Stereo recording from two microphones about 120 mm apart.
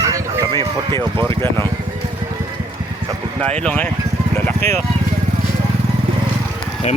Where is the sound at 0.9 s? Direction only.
40° right (ahead or behind).